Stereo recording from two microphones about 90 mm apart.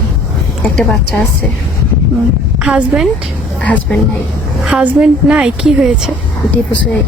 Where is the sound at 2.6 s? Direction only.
5° right (ahead or behind).